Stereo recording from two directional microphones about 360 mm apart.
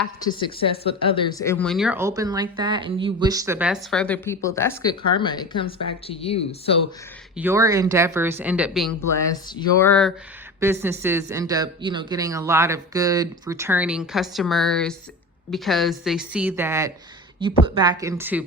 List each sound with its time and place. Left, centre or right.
0.3 s speech: centre
7.3 s speech: centre
10.6 s speech: centre